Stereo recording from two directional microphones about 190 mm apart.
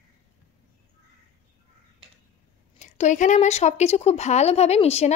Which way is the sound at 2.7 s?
40° left (ahead or behind).